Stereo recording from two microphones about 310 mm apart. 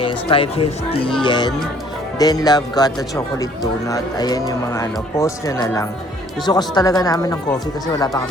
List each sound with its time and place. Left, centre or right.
0.0 s speech: centre